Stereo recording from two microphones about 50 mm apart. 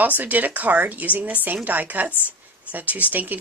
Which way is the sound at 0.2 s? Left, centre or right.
Right.